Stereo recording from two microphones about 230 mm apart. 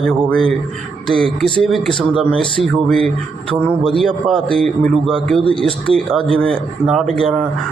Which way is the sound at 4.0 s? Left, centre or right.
Centre.